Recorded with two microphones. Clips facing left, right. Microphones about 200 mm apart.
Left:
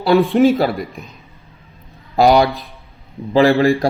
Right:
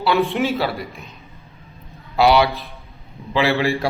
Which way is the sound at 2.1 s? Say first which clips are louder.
Left 3 dB; 45° left (ahead or behind).